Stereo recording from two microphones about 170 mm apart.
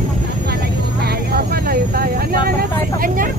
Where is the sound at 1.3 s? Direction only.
65° right (ahead or behind).